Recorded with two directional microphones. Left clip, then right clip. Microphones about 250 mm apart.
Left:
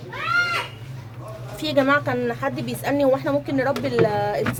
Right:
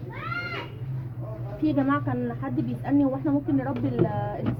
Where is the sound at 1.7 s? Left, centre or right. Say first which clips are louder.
Left 12 dB; left.